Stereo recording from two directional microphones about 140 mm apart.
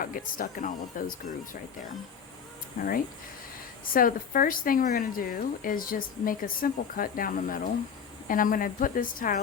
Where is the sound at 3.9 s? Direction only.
90° left.